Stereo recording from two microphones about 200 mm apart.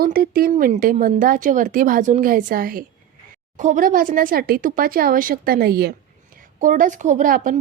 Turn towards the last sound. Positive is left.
turn(degrees=-40)  # may be behind; listen again after turning